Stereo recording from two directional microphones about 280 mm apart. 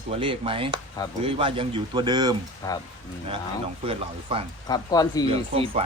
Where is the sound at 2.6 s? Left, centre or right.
Centre.